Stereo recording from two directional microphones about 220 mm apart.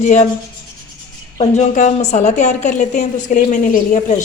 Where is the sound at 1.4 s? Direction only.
30° left (ahead or behind).